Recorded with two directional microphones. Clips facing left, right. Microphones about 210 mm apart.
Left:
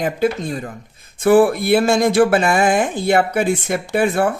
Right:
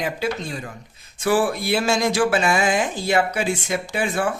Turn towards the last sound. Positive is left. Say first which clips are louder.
# left 6 dB
turn(degrees=55)  # may be behind; listen again after turning